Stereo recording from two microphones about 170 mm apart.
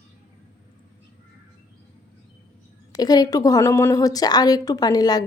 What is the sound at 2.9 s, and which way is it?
A woman's voice, 25° left (ahead or behind).